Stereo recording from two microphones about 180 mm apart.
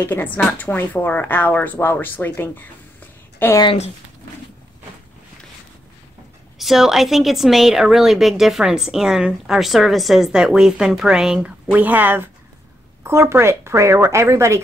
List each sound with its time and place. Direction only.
0.0 s a woman's voice: 10° left (ahead or behind)
3.6 s speech: 35° left (ahead or behind)
6.6 s a woman's voice: centre (ahead or behind)